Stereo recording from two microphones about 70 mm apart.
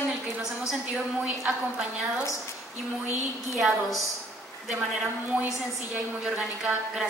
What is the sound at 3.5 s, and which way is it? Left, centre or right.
Speech, centre.